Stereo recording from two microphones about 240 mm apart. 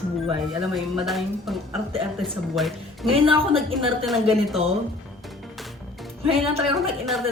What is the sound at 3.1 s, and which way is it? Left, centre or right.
Speech, right.